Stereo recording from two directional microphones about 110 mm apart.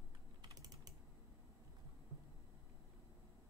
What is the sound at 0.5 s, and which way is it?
Typing, 35° right (ahead or behind).